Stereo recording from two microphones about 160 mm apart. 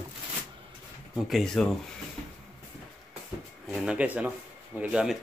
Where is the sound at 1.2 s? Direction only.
Centre (ahead or behind).